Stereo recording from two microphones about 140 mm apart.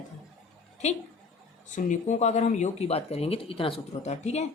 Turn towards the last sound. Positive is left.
turn(degrees=50)  # may be behind; listen again after turning